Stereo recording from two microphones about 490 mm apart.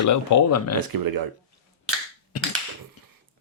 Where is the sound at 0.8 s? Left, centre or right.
Right.